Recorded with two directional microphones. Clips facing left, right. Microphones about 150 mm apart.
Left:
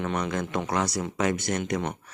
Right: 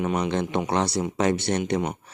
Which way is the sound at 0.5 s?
30° right (ahead or behind).